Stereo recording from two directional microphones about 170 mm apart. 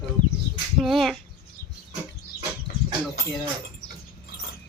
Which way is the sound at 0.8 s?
Centre (ahead or behind).